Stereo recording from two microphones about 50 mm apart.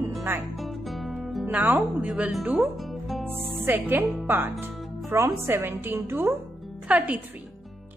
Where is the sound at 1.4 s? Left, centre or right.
Right.